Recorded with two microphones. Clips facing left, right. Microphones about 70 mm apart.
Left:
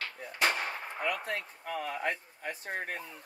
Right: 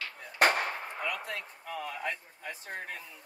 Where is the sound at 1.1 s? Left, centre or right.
Left.